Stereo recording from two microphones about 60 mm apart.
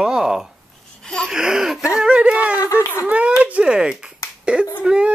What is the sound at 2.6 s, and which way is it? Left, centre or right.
Speech, left.